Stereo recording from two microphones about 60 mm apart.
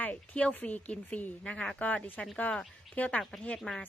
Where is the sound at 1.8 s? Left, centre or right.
Left.